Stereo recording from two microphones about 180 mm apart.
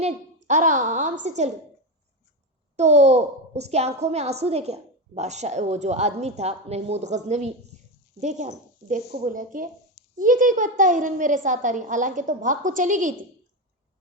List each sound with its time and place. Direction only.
0.4 s a woman's voice: 45° right (ahead or behind)
2.7 s a child's voice: 40° right (ahead or behind)
7.7 s a sound: 40° right (ahead or behind)
8.2 s a woman's voice: 40° right (ahead or behind)